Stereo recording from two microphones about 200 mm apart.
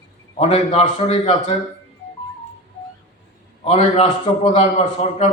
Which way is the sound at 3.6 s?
30° left (ahead or behind).